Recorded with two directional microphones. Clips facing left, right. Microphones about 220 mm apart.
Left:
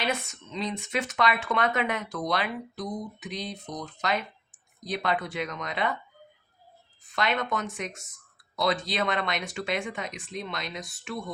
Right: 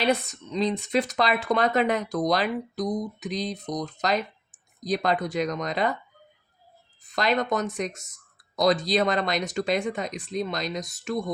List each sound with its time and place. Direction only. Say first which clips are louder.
0.0 s speech: right 6 dB; 35° right (ahead or behind)
7.1 s speech: right 4 dB; 35° right (ahead or behind)